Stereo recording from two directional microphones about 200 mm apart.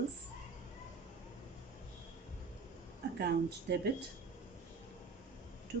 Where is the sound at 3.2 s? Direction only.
55° right (ahead or behind).